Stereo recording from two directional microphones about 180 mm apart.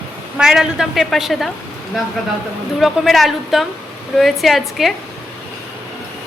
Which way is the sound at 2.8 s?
Centre (ahead or behind).